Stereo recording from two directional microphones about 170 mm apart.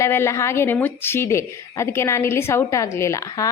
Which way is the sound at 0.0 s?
15° left (ahead or behind).